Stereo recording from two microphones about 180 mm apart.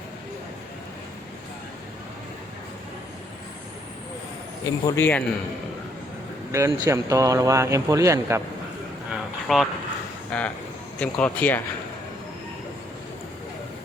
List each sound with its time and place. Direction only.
4.6 s speech: 15° left (ahead or behind)
6.5 s speech: 15° right (ahead or behind)
9.5 s speech: centre (ahead or behind)